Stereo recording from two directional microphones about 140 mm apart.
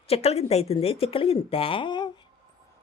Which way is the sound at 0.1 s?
45° left (ahead or behind).